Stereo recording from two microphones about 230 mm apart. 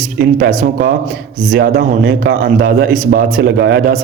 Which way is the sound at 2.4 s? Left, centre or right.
Right.